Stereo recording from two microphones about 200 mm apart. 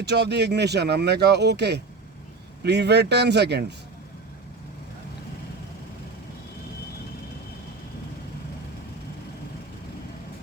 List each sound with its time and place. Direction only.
0.0 s speech: 55° right (ahead or behind)